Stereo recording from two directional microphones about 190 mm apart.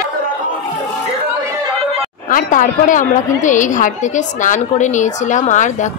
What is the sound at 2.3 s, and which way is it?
A woman's voice, 45° left (ahead or behind).